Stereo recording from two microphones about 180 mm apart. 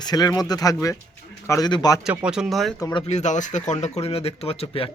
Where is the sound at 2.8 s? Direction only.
20° left (ahead or behind).